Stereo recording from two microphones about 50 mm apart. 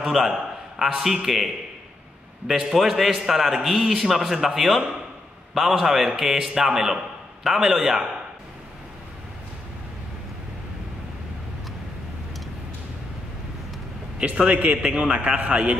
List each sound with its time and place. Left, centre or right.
0.1 s a man's voice: centre
14.1 s a man's voice: right